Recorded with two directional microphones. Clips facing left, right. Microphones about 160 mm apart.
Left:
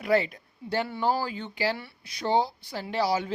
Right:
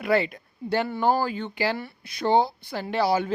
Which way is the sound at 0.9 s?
50° right (ahead or behind).